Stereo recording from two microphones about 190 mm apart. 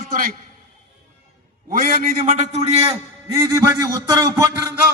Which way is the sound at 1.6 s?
50° right (ahead or behind).